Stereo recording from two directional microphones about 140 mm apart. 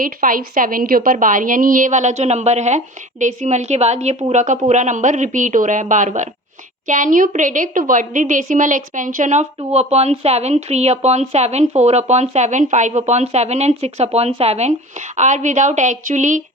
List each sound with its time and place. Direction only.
0.0 s a woman's voice: 80° right; by 9.5 s 60° right (ahead or behind)
9.7 s a woman's voice: 50° right (ahead or behind)